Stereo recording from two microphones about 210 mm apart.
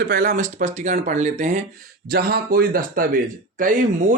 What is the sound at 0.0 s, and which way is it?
Speech, 45° right (ahead or behind).